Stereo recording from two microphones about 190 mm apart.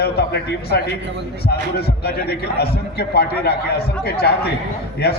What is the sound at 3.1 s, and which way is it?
A man's voice, 55° left (ahead or behind).